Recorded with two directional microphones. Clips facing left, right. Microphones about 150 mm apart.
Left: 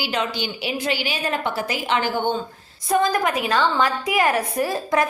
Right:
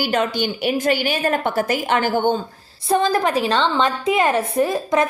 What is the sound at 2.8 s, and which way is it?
A woman's voice, 30° right (ahead or behind).